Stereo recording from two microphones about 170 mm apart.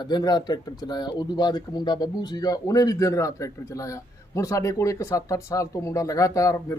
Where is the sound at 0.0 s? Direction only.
25° left (ahead or behind).